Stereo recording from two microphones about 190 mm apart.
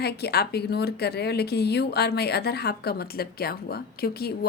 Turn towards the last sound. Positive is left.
turn(degrees=55)  # may be behind; listen again after turning